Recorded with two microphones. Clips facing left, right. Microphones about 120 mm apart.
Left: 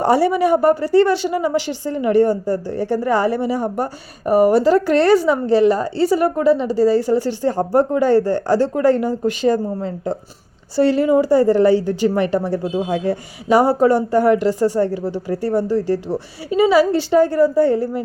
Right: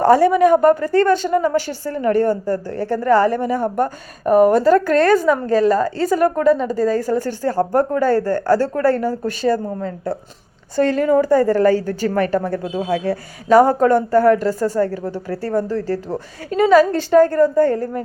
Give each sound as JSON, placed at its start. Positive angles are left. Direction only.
{"t": 0.0, "sound": "speech", "side_deg": 10}